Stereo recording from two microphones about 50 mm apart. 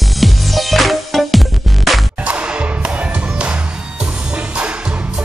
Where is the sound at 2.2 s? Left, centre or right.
Right.